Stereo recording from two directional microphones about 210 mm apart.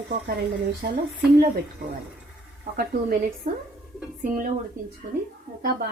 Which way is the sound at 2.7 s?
45° right (ahead or behind).